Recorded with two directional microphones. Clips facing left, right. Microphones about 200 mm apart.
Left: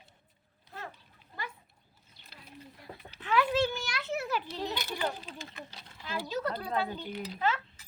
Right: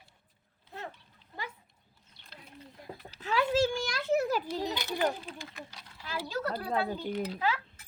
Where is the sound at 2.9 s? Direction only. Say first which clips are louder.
Right 3 dB; 25° right (ahead or behind).